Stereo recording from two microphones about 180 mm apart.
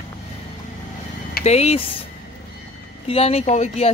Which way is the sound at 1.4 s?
35° left (ahead or behind).